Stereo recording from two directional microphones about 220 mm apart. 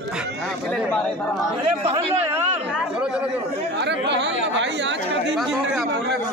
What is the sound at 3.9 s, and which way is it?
Chatter, 55° right (ahead or behind).